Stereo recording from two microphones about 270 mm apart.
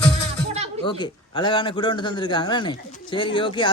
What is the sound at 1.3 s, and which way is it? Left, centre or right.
Speech, centre.